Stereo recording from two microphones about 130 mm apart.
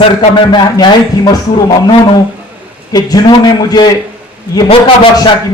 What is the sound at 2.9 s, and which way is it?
A man's voice, 30° left (ahead or behind).